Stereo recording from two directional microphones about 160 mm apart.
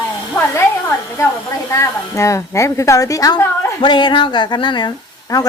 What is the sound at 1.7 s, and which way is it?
A woman's voice, 20° left (ahead or behind).